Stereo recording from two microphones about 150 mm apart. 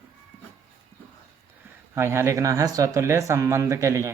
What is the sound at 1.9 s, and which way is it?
Speech, 15° right (ahead or behind).